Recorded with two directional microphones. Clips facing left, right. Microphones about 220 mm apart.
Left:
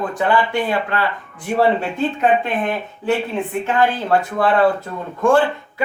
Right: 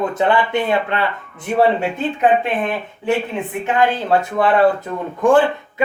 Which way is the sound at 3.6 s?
20° right (ahead or behind).